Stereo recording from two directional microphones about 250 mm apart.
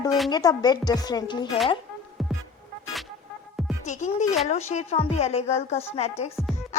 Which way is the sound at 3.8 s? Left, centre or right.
Left.